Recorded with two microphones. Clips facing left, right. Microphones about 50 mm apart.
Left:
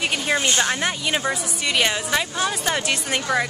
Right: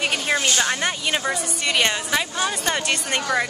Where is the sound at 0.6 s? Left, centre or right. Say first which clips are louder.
Even; centre.